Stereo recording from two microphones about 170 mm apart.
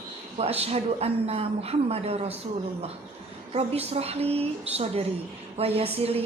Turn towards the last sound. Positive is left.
turn(degrees=-35)  # may be behind; listen again after turning